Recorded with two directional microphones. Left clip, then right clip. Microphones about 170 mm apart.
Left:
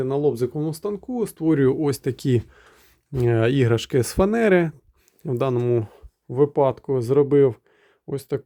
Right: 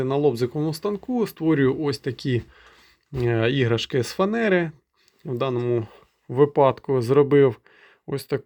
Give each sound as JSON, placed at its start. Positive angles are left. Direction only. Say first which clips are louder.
{"t": 0.0, "sound": "speech", "louder": "even", "side_deg": 10}
{"t": 1.5, "sound": "speech", "louder": "left 2 dB", "side_deg": 30}
{"t": 6.3, "sound": "speech", "louder": "right 1 dB", "side_deg": 15}